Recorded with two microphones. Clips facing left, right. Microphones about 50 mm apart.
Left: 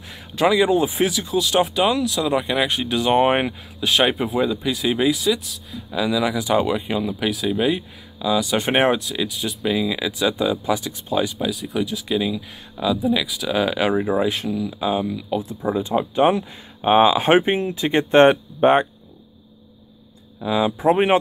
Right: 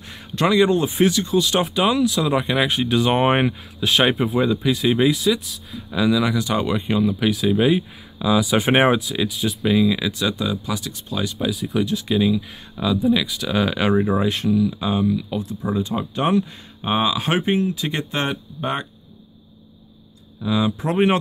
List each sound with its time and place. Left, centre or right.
0.1 s speech: centre
11.3 s speech: centre
15.6 s speech: centre; by 18.9 s left
20.3 s speech: centre